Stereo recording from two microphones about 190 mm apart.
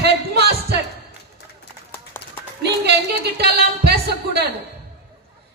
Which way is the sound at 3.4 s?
60° right (ahead or behind).